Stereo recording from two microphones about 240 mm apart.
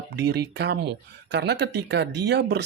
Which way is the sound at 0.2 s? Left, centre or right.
Right.